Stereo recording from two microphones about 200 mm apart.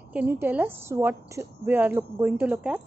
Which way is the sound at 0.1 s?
10° right (ahead or behind).